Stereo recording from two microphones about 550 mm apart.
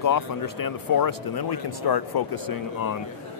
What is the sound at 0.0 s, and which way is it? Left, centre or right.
Speech, left.